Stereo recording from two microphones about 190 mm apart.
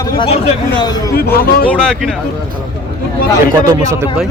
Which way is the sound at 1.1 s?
55° left (ahead or behind).